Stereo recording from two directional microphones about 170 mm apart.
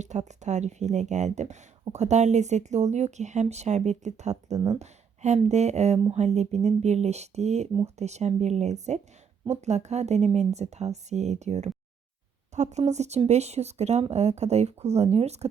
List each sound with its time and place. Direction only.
0.0 s speech: 45° right (ahead or behind)